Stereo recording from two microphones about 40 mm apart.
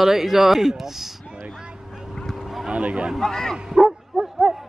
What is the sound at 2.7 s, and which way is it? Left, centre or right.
Speech, right.